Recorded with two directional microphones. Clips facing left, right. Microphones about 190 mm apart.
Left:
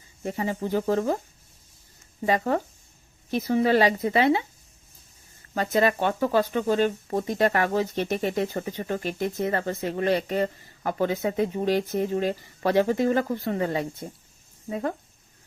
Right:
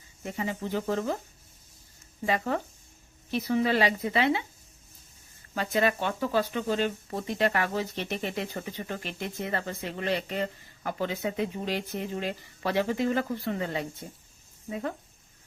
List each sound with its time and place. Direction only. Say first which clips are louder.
0.2 s speech: left 4 dB; 40° left (ahead or behind)
2.2 s speech: left 4 dB; 40° left (ahead or behind)
5.5 s speech: left 4 dB; 40° left (ahead or behind)